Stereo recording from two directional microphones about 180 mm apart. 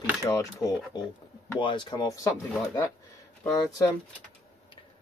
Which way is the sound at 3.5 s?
20° left (ahead or behind).